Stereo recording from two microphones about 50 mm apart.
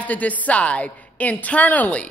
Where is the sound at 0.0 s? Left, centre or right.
Left.